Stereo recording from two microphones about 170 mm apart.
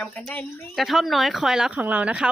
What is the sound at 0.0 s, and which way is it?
Speech, 5° left (ahead or behind).